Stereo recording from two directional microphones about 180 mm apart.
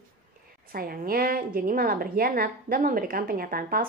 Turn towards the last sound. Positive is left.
turn(degrees=-55)  # may be behind; listen again after turning